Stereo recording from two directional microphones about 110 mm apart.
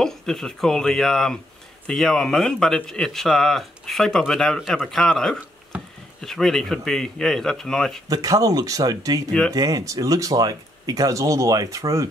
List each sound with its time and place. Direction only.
0.0 s speech: 5° left (ahead or behind)
5.7 s a sound: 10° right (ahead or behind)
6.2 s speech: 5° left (ahead or behind)
8.1 s speech: 35° right (ahead or behind)